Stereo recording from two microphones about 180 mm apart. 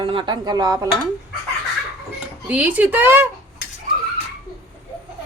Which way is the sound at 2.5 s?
10° right (ahead or behind).